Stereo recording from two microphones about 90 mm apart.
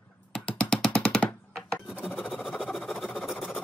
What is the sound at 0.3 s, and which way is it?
Music, 10° left (ahead or behind).